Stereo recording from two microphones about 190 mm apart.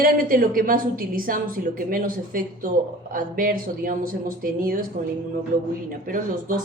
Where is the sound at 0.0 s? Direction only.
50° right (ahead or behind).